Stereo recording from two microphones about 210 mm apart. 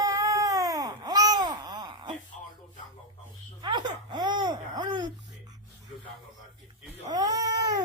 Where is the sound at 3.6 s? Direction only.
20° right (ahead or behind).